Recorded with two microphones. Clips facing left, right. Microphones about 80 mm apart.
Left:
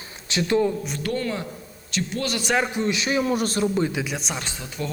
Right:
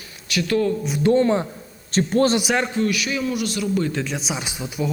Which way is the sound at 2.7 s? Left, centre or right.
Left.